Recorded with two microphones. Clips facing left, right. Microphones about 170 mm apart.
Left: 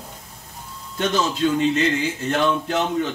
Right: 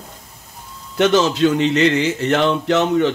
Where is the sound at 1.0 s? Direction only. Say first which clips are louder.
Right 7 dB; 80° right.